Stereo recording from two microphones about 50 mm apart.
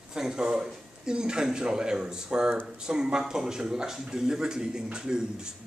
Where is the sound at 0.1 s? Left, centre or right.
Centre.